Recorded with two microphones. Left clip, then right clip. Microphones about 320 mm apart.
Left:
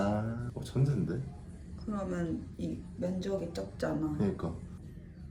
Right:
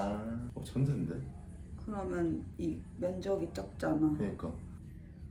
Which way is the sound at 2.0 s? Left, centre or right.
Centre.